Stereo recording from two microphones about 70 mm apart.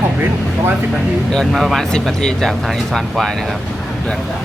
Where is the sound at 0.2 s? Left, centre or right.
Right.